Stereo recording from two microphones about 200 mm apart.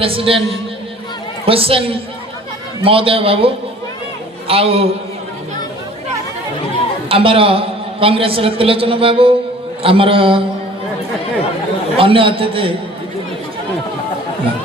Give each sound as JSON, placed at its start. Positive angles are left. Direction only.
{"t": 0.0, "sound": "a man's voice", "side_deg": -25}
{"t": 1.5, "sound": "a man's voice", "side_deg": -25}
{"t": 7.1, "sound": "a man's voice", "side_deg": -25}
{"t": 11.9, "sound": "a man's voice", "side_deg": -25}